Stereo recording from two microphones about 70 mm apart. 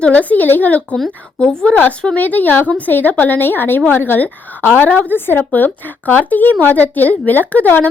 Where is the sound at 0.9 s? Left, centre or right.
Centre.